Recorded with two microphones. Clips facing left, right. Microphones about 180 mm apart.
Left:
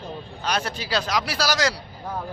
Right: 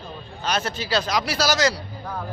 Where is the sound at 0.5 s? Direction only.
10° left (ahead or behind).